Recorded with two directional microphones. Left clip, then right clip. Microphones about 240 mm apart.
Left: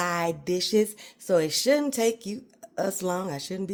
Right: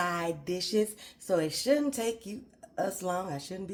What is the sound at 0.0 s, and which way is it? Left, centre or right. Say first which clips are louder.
Music: left 4 dB; left.